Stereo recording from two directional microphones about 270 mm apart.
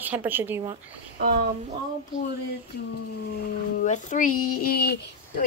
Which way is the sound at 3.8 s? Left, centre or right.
Left.